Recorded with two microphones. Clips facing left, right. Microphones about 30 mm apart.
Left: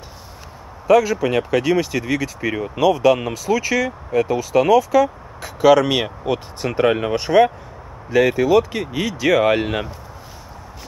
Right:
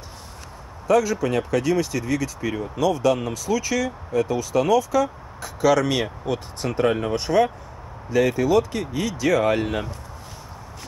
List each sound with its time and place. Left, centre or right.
0.8 s speech: centre
2.9 s speech: centre
6.0 s speech: left
6.9 s speech: left
7.2 s speech: centre